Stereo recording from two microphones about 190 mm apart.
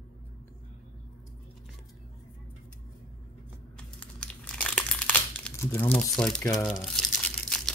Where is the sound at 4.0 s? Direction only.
5° left (ahead or behind).